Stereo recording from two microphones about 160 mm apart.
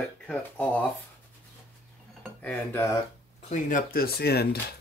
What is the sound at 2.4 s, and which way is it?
Speech, 15° left (ahead or behind).